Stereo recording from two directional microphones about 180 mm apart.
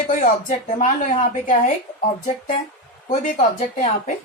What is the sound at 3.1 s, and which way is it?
Speech, 45° left (ahead or behind).